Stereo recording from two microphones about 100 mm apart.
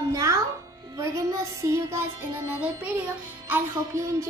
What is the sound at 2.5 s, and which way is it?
Speech, 15° right (ahead or behind).